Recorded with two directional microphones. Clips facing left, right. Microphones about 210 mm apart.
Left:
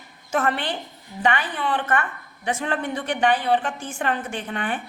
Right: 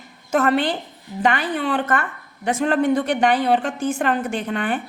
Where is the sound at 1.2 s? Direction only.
40° right (ahead or behind).